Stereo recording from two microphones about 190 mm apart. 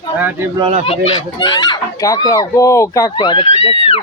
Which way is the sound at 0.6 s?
30° right (ahead or behind).